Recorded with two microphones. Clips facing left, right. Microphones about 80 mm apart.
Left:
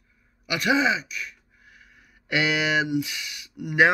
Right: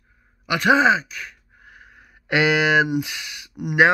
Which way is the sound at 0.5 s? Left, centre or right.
Right.